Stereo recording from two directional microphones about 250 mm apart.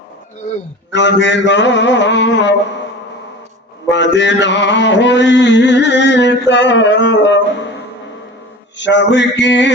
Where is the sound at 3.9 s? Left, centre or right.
Left.